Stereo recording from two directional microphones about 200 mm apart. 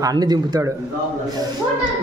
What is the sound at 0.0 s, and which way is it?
Speech, 20° right (ahead or behind).